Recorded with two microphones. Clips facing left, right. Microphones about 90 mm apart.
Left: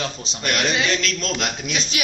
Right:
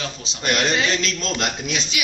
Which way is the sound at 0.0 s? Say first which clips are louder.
Left 3 dB; 40° left (ahead or behind).